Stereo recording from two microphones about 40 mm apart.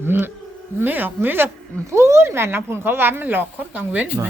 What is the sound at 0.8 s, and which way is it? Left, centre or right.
Speech, right.